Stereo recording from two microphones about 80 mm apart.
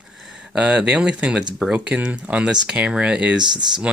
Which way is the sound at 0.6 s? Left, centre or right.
Centre.